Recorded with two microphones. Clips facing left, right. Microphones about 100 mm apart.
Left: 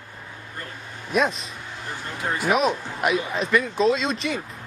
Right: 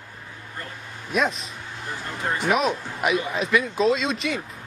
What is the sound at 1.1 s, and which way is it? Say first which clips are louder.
Speech: left 1 dB; centre (ahead or behind).